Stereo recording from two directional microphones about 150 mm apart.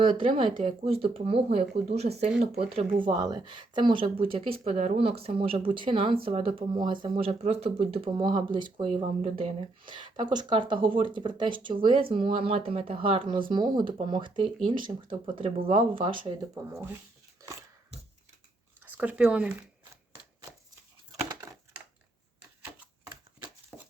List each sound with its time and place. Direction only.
0.0 s speech: 35° right (ahead or behind)
3.0 s speech: 30° right (ahead or behind)
7.3 s speech: 45° right (ahead or behind)
16.6 s speech: 15° right (ahead or behind)
18.8 s speech: 10° right (ahead or behind)
23.7 s a sound: 5° right (ahead or behind)